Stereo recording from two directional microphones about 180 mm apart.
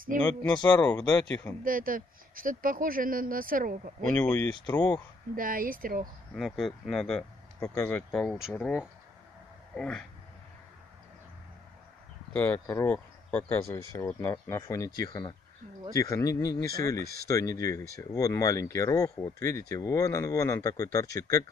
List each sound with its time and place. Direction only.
0.2 s speech: 10° left (ahead or behind)
0.6 s speech: 25° left (ahead or behind)
0.8 s speech: 10° left (ahead or behind)
1.6 s speech: 50° right (ahead or behind)
4.1 s speech: 15° left (ahead or behind)
5.3 s speech: 50° right (ahead or behind)
6.3 s speech: centre (ahead or behind)
9.8 s speech: 5° left (ahead or behind)
12.3 s speech: 10° left (ahead or behind); by 15.3 s 25° left (ahead or behind)
15.9 s speech: 15° left (ahead or behind)